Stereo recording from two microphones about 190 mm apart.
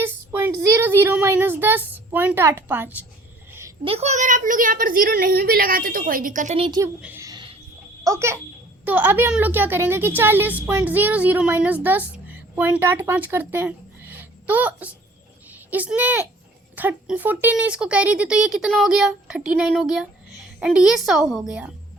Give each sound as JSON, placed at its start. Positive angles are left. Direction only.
{"t": 0.0, "sound": "speech", "side_deg": -10}
{"t": 3.8, "sound": "a woman's voice", "side_deg": -35}
{"t": 6.7, "sound": "a woman's voice", "side_deg": -20}
{"t": 7.0, "sound": "a sound", "side_deg": -15}
{"t": 8.0, "sound": "a woman's voice", "side_deg": -15}